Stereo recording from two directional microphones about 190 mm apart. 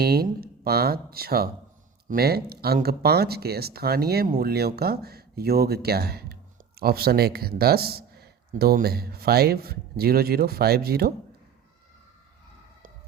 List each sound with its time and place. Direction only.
0.0 s a man's voice: 55° right (ahead or behind)